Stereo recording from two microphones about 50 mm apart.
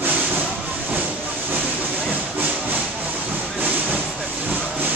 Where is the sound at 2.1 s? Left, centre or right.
Right.